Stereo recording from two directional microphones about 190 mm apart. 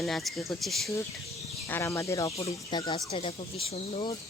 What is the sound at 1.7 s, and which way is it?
Speech, 15° left (ahead or behind).